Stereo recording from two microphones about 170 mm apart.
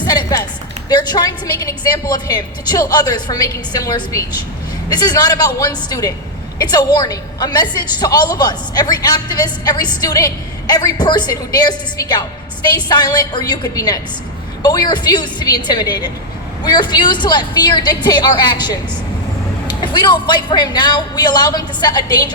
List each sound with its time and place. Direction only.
0.1 s a sound: 25° left (ahead or behind)
0.9 s a woman's voice: 25° left (ahead or behind)
19.8 s a woman's voice: 25° left (ahead or behind)